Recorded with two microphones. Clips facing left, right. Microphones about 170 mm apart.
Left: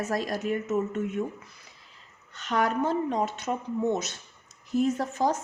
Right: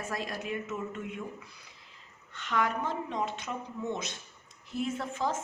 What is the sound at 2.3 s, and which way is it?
Speech, 40° left (ahead or behind).